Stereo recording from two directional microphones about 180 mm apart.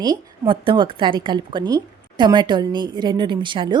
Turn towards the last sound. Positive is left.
turn(degrees=-25)  # may be behind; listen again after turning